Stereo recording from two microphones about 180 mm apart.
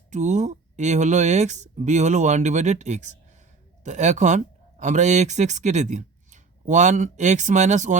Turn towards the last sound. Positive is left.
turn(degrees=-40)  # may be behind; listen again after turning